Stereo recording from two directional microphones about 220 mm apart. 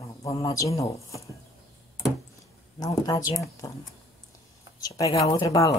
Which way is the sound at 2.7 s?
15° left (ahead or behind).